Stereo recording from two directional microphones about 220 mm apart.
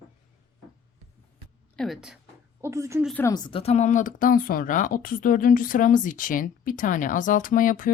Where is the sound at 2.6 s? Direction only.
15° right (ahead or behind).